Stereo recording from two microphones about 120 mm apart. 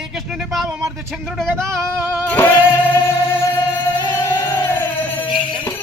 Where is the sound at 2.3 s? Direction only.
20° left (ahead or behind).